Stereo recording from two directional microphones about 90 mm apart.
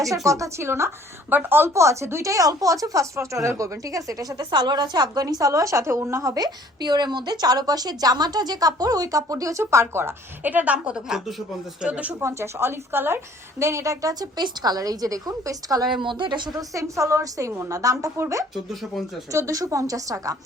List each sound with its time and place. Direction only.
0.3 s a woman's voice: 35° right (ahead or behind); by 11.9 s 5° right (ahead or behind)
11.9 s a woman's voice: 15° right (ahead or behind)
12.2 s a woman's voice: 30° right (ahead or behind)
15.9 s speech: 60° right (ahead or behind)
16.6 s a woman's voice: 35° right (ahead or behind)
18.5 s speech: centre (ahead or behind)
19.3 s a woman's voice: 35° right (ahead or behind)